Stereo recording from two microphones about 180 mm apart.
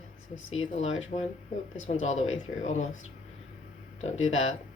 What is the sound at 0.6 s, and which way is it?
Speech, 35° left (ahead or behind).